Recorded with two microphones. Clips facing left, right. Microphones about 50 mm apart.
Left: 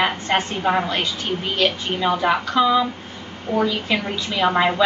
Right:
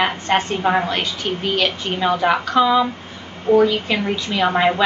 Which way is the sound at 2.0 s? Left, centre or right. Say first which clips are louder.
Right 2 dB; centre.